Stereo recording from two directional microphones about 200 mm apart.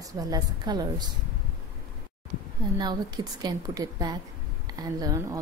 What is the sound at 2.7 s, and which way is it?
A woman's voice, 20° right (ahead or behind).